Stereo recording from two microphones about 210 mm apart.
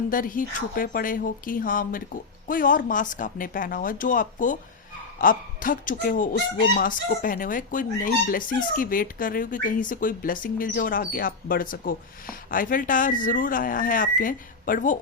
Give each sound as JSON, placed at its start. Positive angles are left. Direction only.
{"t": 0.1, "sound": "speech", "side_deg": 40}